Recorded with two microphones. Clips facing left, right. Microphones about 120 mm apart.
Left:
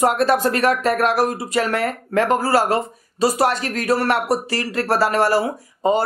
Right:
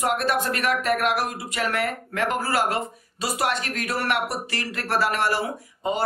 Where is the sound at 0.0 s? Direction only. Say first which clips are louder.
Left 7 dB; 35° left (ahead or behind).